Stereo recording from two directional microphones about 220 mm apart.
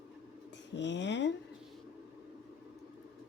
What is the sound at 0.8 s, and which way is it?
Speech, 55° left (ahead or behind).